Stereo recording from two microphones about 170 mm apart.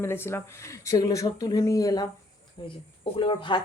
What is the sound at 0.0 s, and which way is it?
A woman's voice, 15° left (ahead or behind).